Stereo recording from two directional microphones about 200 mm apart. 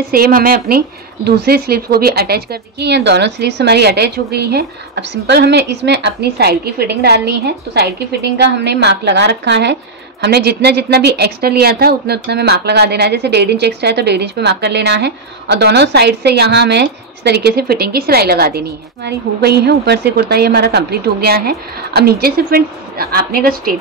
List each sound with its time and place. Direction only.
0.1 s speech: 50° right (ahead or behind)